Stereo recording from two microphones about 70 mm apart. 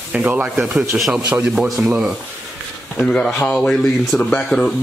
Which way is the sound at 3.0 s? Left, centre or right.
Centre.